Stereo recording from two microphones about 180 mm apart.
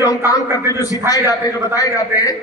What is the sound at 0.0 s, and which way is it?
A man's voice, 20° left (ahead or behind).